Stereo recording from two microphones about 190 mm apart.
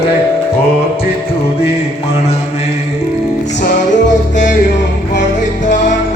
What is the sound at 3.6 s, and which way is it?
Music, 40° left (ahead or behind).